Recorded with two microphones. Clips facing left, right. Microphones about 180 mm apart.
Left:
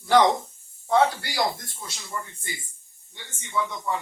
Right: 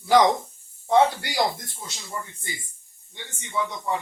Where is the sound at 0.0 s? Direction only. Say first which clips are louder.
Right 1 dB; 10° right (ahead or behind).